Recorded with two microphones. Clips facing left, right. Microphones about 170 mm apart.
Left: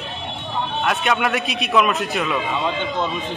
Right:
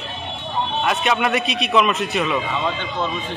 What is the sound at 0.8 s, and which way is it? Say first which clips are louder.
A man's voice: even; centre (ahead or behind).